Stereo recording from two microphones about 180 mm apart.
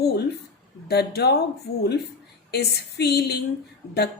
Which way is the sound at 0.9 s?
65° left (ahead or behind).